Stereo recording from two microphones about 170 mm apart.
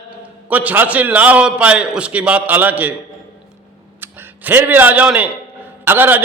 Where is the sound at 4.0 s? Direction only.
15° right (ahead or behind).